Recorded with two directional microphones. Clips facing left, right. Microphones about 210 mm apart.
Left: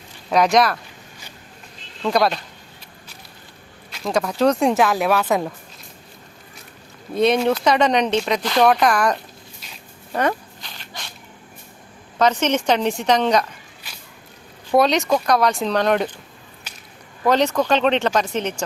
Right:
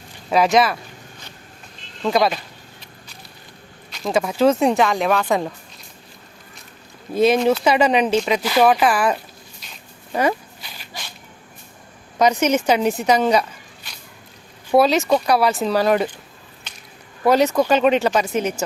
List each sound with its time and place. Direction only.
0.3 s speech: 5° right (ahead or behind)
2.0 s speech: centre (ahead or behind)
3.9 s speech: centre (ahead or behind)
7.1 s speech: centre (ahead or behind)
10.1 s dog: 10° right (ahead or behind)
12.2 s speech: 10° right (ahead or behind)
14.7 s speech: 5° right (ahead or behind)
16.7 s whip: 10° left (ahead or behind)
17.2 s speech: 10° right (ahead or behind)